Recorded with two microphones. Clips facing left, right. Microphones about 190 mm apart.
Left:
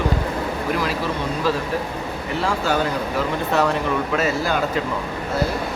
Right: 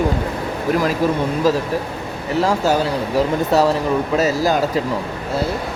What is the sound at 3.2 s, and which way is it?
Speech, 35° right (ahead or behind).